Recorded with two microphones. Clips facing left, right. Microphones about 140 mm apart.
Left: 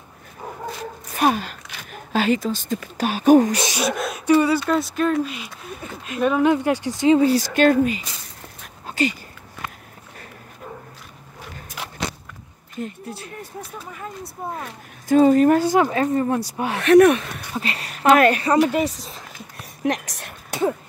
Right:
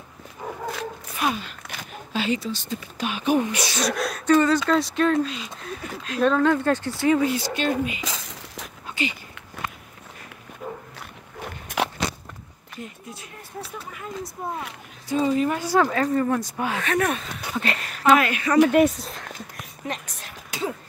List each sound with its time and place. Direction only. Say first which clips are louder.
1.1 s a sound: left 7 dB; 45° left (ahead or behind)
2.1 s speech: left 5 dB; 45° left (ahead or behind)
3.7 s speech: left 2 dB; 5° left (ahead or behind)
7.2 s speech: left 7 dB; 35° left (ahead or behind)
8.8 s a sound: left 6 dB; 40° left (ahead or behind)
11.0 s walk: right 4 dB; 70° right (ahead or behind)
12.8 s speech: left 8 dB; 30° left (ahead or behind)
14.6 s speech: left 1 dB; 50° left (ahead or behind)
15.7 s speech: left 2 dB; 20° left (ahead or behind)
16.8 s speech: left 15 dB; 70° left (ahead or behind)
18.2 s speech: left 9 dB; 40° left (ahead or behind)
18.6 s speech: right 3 dB; centre (ahead or behind)
19.8 s a sound: left 9 dB; 75° left (ahead or behind); by 20.7 s 55° left (ahead or behind)